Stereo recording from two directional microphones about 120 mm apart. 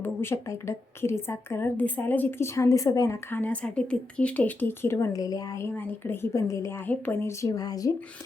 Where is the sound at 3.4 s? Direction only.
10° left (ahead or behind).